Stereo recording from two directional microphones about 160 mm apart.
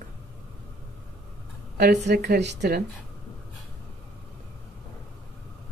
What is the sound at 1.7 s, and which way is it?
Speech, 90° right.